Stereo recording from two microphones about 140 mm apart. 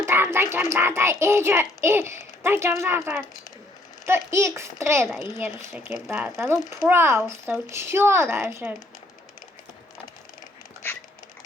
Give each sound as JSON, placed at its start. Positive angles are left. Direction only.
{"t": 0.0, "sound": "a sound", "side_deg": -15}
{"t": 0.5, "sound": "a child's voice", "side_deg": -20}
{"t": 6.6, "sound": "speech", "side_deg": 25}
{"t": 6.8, "sound": "a child's voice", "side_deg": -15}